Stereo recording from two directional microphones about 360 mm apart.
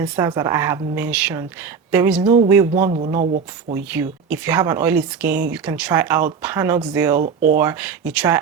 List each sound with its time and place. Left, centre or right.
0.0 s a woman's voice: centre
3.9 s a woman's voice: centre
7.2 s speech: right
7.6 s speech: centre